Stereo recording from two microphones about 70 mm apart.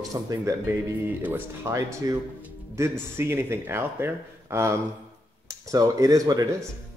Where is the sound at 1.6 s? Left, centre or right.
Right.